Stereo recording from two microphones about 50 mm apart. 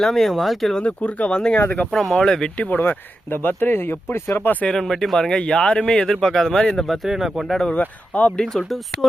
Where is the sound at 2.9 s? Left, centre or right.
Left.